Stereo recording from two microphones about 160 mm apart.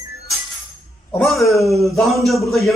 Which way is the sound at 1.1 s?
Centre (ahead or behind).